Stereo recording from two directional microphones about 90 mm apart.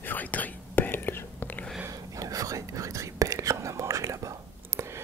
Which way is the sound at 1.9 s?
40° right (ahead or behind).